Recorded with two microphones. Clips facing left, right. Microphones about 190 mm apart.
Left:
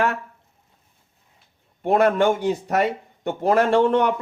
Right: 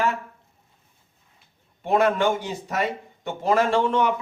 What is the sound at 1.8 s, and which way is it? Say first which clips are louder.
Speech: left 3 dB; 55° left (ahead or behind).